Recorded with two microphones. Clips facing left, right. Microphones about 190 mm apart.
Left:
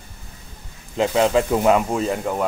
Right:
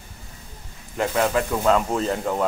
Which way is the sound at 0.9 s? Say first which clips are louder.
Left 4 dB; 20° left (ahead or behind).